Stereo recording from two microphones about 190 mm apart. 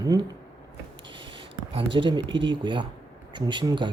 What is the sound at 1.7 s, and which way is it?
Speech, 30° right (ahead or behind).